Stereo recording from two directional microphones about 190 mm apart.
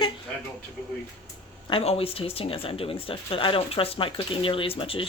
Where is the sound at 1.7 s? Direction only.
30° left (ahead or behind).